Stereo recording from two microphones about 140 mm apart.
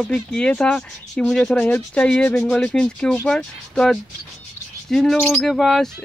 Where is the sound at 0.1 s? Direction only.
5° left (ahead or behind).